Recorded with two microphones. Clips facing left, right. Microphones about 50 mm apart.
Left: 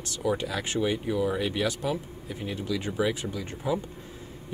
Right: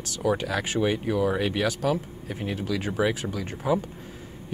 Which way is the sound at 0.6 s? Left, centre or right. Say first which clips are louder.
Right 2 dB; centre.